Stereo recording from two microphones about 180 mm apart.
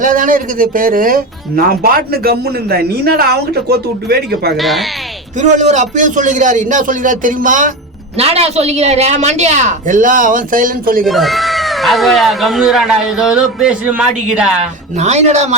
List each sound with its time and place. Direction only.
0.0 s speech: 50° right (ahead or behind); by 4.5 s 65° right (ahead or behind)
4.5 s speech: centre (ahead or behind)
5.4 s speech: 40° right (ahead or behind)
8.2 s a woman's voice: 35° right (ahead or behind); by 11.0 s 50° right (ahead or behind)
11.0 s speech: centre (ahead or behind)
14.9 s a woman's voice: 40° right (ahead or behind)